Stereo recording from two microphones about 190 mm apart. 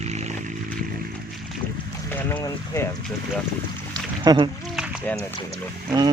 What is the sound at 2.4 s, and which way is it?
Speech, 20° left (ahead or behind).